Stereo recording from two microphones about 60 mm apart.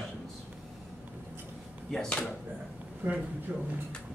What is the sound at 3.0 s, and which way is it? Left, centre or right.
Speech, right.